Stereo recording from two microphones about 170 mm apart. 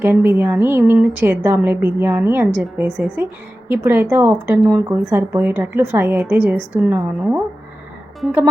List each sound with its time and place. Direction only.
0.0 s a woman's voice: 5° right (ahead or behind)